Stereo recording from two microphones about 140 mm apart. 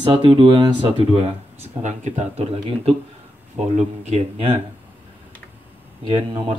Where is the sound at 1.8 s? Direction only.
60° right (ahead or behind).